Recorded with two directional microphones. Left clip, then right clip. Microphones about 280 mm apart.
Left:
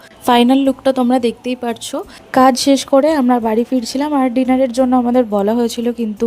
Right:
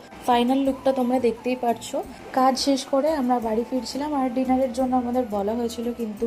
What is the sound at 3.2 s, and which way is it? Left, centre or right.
A woman's voice, left.